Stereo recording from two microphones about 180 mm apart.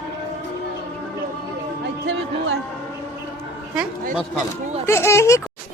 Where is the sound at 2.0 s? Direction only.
80° right.